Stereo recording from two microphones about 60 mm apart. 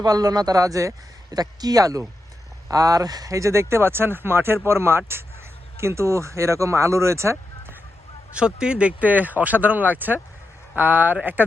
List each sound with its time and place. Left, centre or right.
0.0 s speech: right
2.6 s speech: right
8.4 s speech: centre; by 11.4 s right